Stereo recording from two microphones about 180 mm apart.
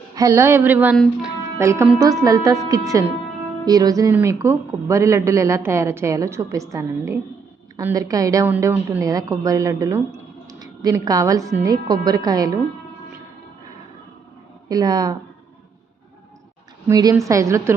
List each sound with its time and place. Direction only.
0.2 s a woman's voice: 15° right (ahead or behind)
14.7 s a woman's voice: 20° right (ahead or behind)
16.9 s a woman's voice: 20° right (ahead or behind)